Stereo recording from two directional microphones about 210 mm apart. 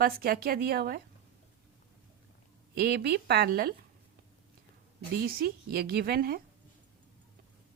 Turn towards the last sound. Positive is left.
turn(degrees=-45)  # may be behind; listen again after turning